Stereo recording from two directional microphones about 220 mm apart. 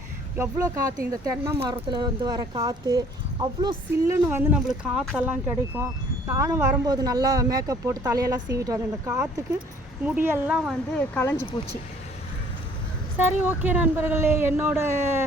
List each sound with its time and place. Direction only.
0.3 s speech: 15° right (ahead or behind); by 11.4 s 10° left (ahead or behind)
13.1 s speech: 10° right (ahead or behind)